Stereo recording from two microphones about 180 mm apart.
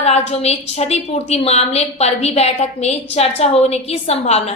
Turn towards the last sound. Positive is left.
turn(degrees=35)  # may be behind; listen again after turning